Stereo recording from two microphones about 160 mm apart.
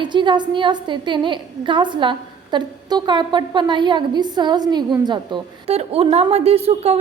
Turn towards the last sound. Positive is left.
turn(degrees=-40)  # may be behind; listen again after turning